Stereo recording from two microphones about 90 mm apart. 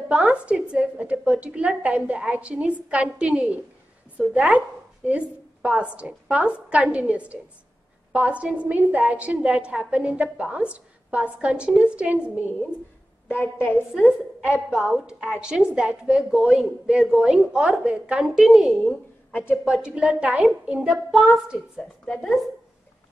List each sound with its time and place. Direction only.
0.1 s a woman's voice: 15° right (ahead or behind)
13.8 s a woman's voice: 5° right (ahead or behind)
19.3 s a woman's voice: 20° left (ahead or behind)
19.6 s a woman's voice: 10° right (ahead or behind)
22.0 s a woman's voice: 5° left (ahead or behind)